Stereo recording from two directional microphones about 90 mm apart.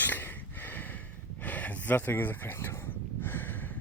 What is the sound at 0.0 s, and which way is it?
Snort, 20° left (ahead or behind).